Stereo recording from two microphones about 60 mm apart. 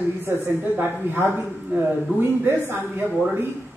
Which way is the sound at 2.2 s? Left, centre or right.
Right.